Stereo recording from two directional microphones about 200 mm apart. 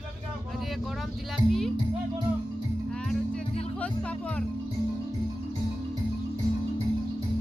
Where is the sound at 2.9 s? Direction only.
5° left (ahead or behind).